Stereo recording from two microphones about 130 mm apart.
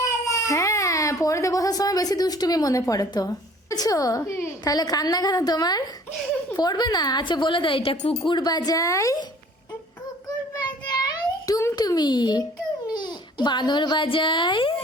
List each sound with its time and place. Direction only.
0.0 s a child's voice: 25° left (ahead or behind)
10.8 s a sound: 30° left (ahead or behind)
12.9 s a child's voice: 35° left (ahead or behind)